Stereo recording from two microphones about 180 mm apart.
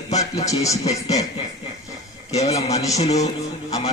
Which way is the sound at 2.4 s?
35° left (ahead or behind).